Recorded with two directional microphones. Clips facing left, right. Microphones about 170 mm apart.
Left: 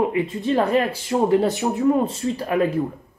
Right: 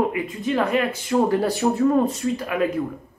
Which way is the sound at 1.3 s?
20° left (ahead or behind).